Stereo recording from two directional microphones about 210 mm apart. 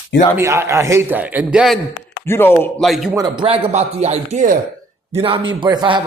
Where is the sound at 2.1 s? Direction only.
10° left (ahead or behind).